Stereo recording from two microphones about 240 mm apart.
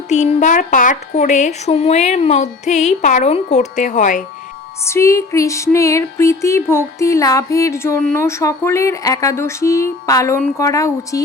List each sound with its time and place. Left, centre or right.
0.1 s speech: left
4.9 s music: centre